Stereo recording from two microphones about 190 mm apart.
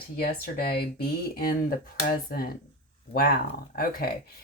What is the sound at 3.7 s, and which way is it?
Speech, 50° left (ahead or behind).